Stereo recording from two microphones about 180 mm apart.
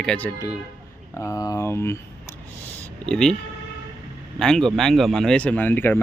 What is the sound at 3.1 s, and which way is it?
Speech, 5° left (ahead or behind).